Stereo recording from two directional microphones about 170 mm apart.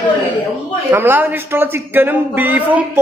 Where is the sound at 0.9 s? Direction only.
15° right (ahead or behind).